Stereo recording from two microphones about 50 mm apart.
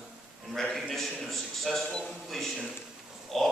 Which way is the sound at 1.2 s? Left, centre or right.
Centre.